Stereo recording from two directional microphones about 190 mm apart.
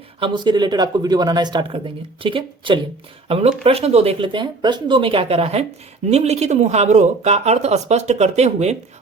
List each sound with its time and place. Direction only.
0.2 s speech: 25° right (ahead or behind)